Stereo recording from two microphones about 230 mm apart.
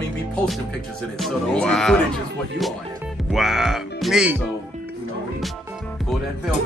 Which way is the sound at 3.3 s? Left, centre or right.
Centre.